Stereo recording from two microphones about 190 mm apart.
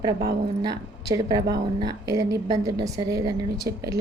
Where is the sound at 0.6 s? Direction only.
20° right (ahead or behind).